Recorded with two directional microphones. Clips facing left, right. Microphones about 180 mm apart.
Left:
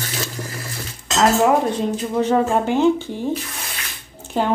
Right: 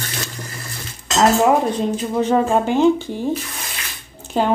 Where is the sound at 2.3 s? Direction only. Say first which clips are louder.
Right 2 dB; 15° right (ahead or behind).